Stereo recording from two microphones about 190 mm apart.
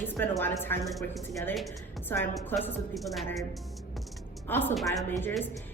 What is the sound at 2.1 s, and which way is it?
Music, 10° left (ahead or behind).